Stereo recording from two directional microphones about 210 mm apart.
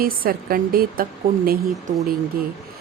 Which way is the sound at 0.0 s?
45° right (ahead or behind).